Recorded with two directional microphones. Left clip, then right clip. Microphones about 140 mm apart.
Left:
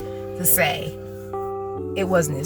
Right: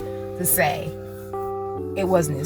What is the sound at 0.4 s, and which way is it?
Speech, 25° left (ahead or behind).